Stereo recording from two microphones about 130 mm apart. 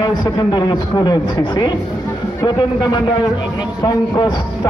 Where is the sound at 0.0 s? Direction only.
35° left (ahead or behind).